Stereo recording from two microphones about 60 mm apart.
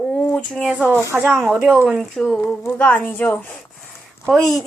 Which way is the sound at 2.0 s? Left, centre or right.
Centre.